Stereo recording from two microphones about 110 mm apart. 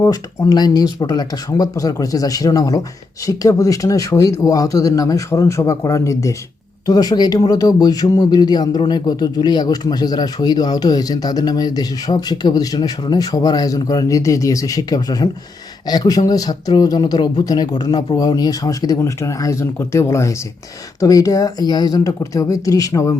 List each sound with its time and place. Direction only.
0.0 s speech: 30° left (ahead or behind)